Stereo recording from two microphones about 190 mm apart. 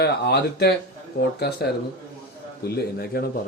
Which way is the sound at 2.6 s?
55° left (ahead or behind).